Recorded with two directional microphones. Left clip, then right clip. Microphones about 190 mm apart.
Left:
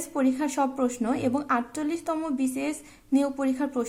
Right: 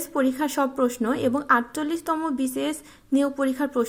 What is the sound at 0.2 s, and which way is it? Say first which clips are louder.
A woman's voice: right 2 dB; 20° right (ahead or behind).